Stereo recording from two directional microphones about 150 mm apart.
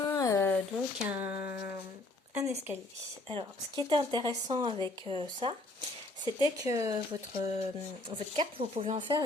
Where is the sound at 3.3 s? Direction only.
35° right (ahead or behind).